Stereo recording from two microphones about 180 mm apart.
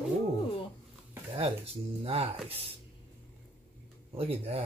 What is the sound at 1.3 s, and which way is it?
Speech, 35° right (ahead or behind).